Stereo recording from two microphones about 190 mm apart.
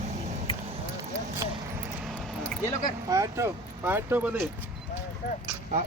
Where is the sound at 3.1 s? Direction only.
15° right (ahead or behind).